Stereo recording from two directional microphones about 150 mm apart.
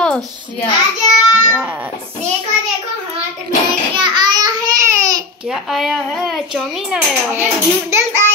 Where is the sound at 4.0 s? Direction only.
30° right (ahead or behind).